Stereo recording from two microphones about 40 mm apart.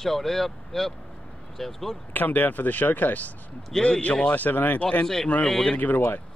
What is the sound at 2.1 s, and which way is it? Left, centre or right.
Speech, left.